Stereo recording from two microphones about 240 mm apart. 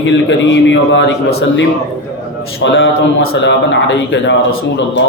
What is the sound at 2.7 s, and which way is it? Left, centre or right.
A man's voice, left.